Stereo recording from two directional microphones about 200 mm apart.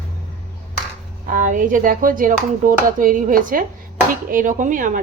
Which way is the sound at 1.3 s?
40° right (ahead or behind).